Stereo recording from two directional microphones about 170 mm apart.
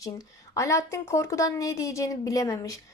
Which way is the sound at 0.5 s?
20° left (ahead or behind).